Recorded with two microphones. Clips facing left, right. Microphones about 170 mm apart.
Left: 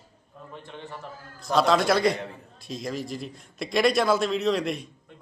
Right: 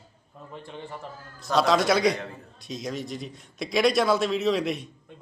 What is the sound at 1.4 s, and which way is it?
A man's voice, centre (ahead or behind).